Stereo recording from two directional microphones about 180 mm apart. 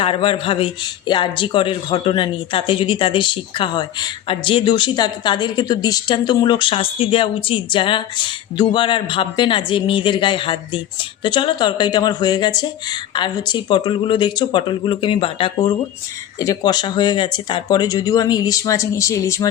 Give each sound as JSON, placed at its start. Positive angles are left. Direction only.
{"t": 0.0, "sound": "speech", "side_deg": 30}